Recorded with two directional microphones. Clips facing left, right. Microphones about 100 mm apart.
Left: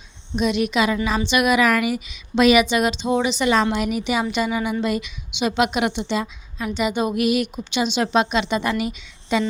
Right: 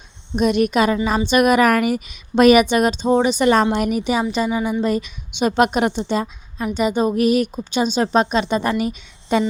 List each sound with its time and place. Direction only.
0.3 s a woman's voice: 45° right (ahead or behind)
4.4 s speech: 15° right (ahead or behind)
4.8 s a woman's voice: 40° right (ahead or behind)